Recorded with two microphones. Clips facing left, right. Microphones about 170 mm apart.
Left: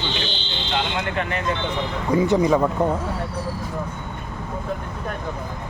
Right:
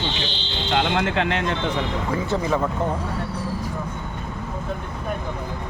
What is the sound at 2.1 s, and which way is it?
Speech, 15° left (ahead or behind).